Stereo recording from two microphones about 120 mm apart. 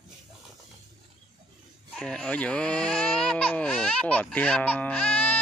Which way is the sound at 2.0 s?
5° left (ahead or behind).